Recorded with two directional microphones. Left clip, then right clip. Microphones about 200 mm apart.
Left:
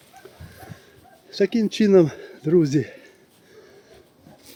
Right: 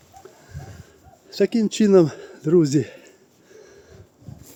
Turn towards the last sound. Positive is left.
turn(degrees=-15)  # may be behind; listen again after turning